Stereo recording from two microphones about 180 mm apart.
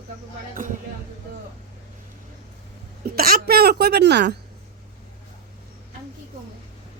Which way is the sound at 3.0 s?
55° right (ahead or behind).